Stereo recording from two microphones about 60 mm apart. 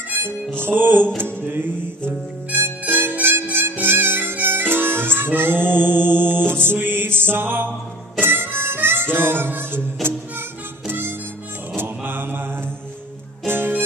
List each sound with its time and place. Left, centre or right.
0.6 s music: right
3.4 s harmonica: right
5.9 s music: right
8.2 s harmonica: right
10.0 s music: centre
10.9 s harmonica: right
11.7 s mantra: right
13.5 s music: right